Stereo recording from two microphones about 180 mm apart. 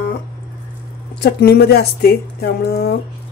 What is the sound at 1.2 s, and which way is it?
Speech, 60° left (ahead or behind).